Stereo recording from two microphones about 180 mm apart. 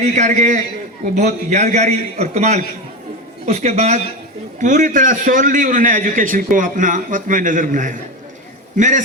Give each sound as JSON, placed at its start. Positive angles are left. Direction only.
{"t": 0.0, "sound": "a man's voice", "side_deg": -40}